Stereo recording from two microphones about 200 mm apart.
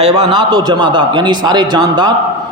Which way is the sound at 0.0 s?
25° right (ahead or behind).